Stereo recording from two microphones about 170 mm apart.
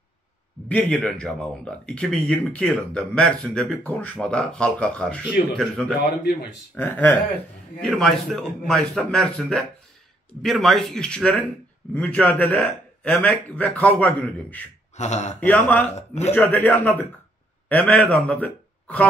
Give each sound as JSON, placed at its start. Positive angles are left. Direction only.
{"t": 0.7, "sound": "a man's voice", "side_deg": 5}
{"t": 15.0, "sound": "speech", "side_deg": 45}
{"t": 15.4, "sound": "a man's voice", "side_deg": 10}
{"t": 15.9, "sound": "a man's voice", "side_deg": 40}
{"t": 16.3, "sound": "a man's voice", "side_deg": 10}